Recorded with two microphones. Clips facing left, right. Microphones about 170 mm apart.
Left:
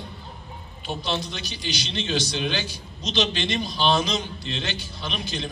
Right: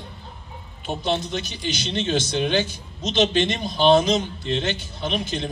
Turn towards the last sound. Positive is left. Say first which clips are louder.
# right 5 dB
turn(degrees=-50)  # may be behind; listen again after turning